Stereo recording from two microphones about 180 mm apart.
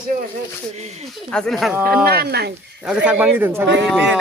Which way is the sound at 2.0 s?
60° right (ahead or behind).